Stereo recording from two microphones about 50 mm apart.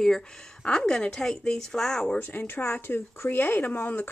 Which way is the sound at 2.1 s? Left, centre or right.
Left.